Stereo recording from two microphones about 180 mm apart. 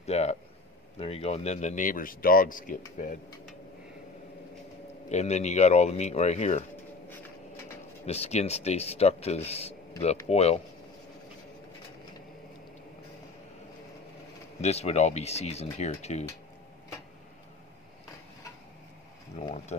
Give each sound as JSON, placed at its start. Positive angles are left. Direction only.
{"t": 0.0, "sound": "a sound", "side_deg": 35}
{"t": 0.9, "sound": "speech", "side_deg": 35}
{"t": 5.1, "sound": "speech", "side_deg": 40}
{"t": 8.0, "sound": "speech", "side_deg": 35}
{"t": 14.6, "sound": "speech", "side_deg": 35}
{"t": 19.4, "sound": "speech", "side_deg": 40}